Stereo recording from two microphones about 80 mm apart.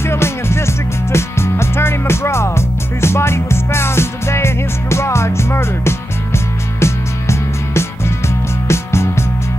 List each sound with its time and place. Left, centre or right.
0.0 s music: left